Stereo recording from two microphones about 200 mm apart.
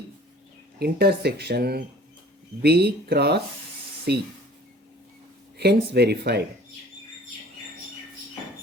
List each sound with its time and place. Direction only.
0.8 s speech: 55° right (ahead or behind)
5.5 s speech: 55° right (ahead or behind)